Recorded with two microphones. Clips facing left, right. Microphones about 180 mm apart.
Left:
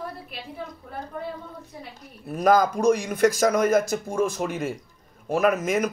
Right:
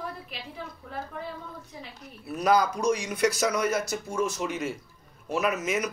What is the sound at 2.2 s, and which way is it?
Speech, 50° left (ahead or behind).